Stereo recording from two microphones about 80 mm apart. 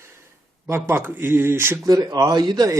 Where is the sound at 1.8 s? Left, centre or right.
Right.